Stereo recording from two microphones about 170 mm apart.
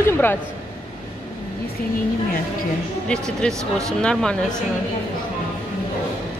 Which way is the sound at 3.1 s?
5° left (ahead or behind).